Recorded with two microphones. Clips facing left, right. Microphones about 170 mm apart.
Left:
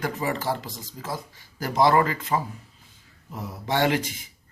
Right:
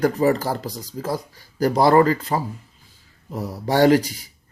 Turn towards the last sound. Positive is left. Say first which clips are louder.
# right 8 dB
turn(degrees=-35)  # may be behind; listen again after turning